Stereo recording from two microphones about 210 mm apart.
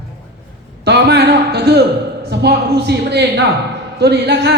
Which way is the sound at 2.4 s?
50° right (ahead or behind).